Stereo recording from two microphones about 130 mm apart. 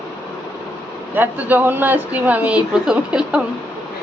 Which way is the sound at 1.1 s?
15° right (ahead or behind).